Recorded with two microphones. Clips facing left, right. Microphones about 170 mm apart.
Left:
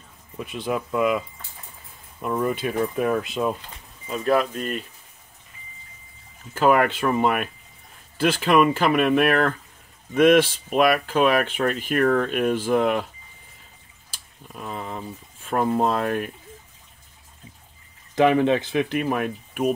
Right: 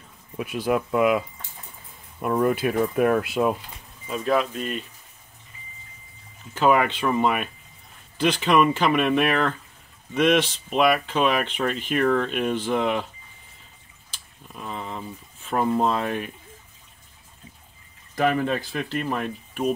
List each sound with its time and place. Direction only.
0.4 s speech: 5° right (ahead or behind)
2.2 s speech: 5° right (ahead or behind)
6.5 s speech: 5° left (ahead or behind)
14.1 s speech: 5° left (ahead or behind)
18.1 s speech: 20° left (ahead or behind)